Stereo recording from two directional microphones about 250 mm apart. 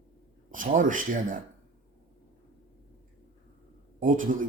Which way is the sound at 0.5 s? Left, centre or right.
Right.